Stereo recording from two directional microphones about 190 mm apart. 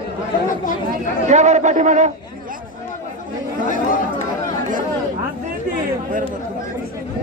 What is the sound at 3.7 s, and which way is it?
Chatter, 45° left (ahead or behind).